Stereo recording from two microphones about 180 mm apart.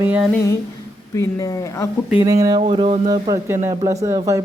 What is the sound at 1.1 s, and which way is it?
Speech, 15° left (ahead or behind).